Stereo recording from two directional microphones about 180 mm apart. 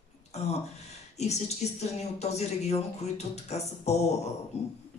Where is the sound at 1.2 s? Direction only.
40° left (ahead or behind).